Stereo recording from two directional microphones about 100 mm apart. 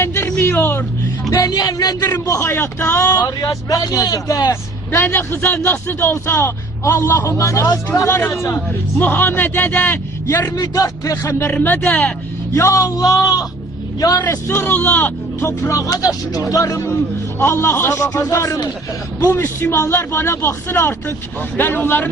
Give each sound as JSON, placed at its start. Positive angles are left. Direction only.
{"t": 0.0, "sound": "music", "side_deg": 25}
{"t": 1.3, "sound": "a man's voice", "side_deg": 40}
{"t": 3.1, "sound": "a man's voice", "side_deg": 35}
{"t": 4.9, "sound": "a man's voice", "side_deg": 20}
{"t": 10.5, "sound": "a man's voice", "side_deg": 35}
{"t": 12.5, "sound": "a man's voice", "side_deg": 30}
{"t": 14.2, "sound": "a man's voice", "side_deg": 25}
{"t": 19.2, "sound": "a man's voice", "side_deg": 25}